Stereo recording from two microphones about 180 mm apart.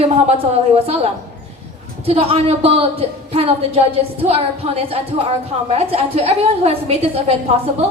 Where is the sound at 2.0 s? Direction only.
35° right (ahead or behind).